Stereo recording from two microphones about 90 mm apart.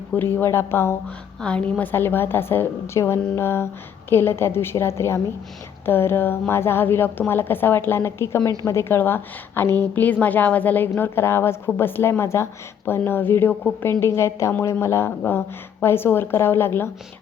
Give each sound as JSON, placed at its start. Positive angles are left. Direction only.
{"t": 0.1, "sound": "a woman's voice", "side_deg": 20}
{"t": 1.4, "sound": "a woman's voice", "side_deg": 10}
{"t": 1.8, "sound": "a woman's voice", "side_deg": 25}
{"t": 14.0, "sound": "a woman's voice", "side_deg": 30}